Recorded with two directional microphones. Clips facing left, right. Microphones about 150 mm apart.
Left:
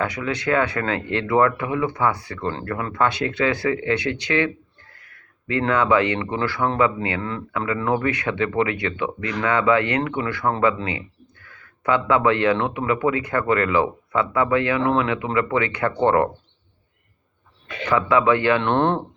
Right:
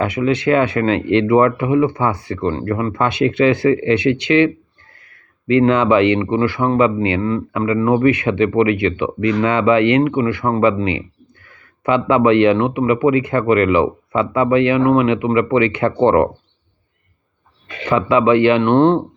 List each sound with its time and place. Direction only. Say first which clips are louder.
0.0 s speech: right 8 dB; 20° right (ahead or behind)
17.8 s speech: right 4 dB; 20° right (ahead or behind)